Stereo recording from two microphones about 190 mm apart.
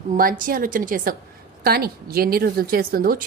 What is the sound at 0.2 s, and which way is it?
A woman's voice, 45° right (ahead or behind).